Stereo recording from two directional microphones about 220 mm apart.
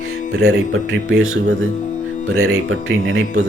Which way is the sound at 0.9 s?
60° right (ahead or behind).